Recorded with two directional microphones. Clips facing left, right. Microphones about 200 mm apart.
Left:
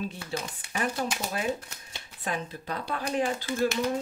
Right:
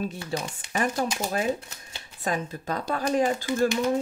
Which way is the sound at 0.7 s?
45° right (ahead or behind).